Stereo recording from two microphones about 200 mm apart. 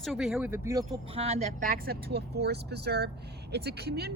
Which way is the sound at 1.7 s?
50° right (ahead or behind).